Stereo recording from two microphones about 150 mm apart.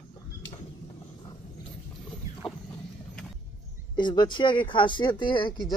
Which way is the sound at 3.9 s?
30° left (ahead or behind).